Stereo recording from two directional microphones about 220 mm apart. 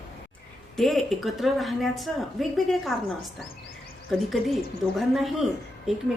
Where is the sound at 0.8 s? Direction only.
Centre (ahead or behind).